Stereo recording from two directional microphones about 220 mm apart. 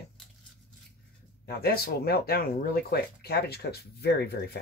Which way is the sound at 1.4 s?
45° left (ahead or behind).